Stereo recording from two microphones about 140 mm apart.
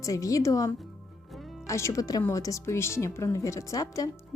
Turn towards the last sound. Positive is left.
turn(degrees=25)  # may be behind; listen again after turning